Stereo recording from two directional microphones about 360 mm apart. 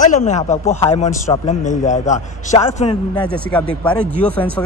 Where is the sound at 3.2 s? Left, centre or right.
Centre.